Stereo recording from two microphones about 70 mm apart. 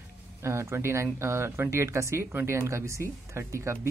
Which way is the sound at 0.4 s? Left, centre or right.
Right.